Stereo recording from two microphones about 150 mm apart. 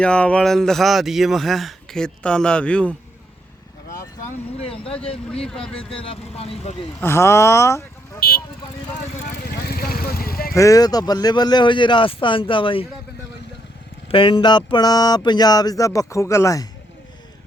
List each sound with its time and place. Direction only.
0.0 s speech: 5° left (ahead or behind)
4.6 s speech: 40° left (ahead or behind)
5.3 s speech: 5° left (ahead or behind)
5.7 s speech: 35° left (ahead or behind)
7.0 s speech: 15° left (ahead or behind)
9.6 s vehicle: 85° left
10.5 s speech: 20° left (ahead or behind)
14.1 s a sound: 35° left (ahead or behind)